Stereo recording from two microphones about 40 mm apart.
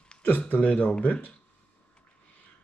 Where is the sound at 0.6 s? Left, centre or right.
Left.